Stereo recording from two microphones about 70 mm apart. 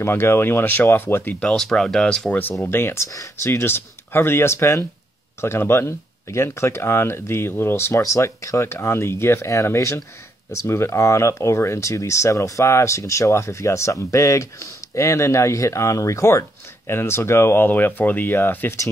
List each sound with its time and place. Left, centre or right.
0.0 s speech: left
1.4 s speech: centre
2.6 s speech: left